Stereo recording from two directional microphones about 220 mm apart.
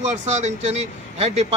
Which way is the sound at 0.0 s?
30° right (ahead or behind).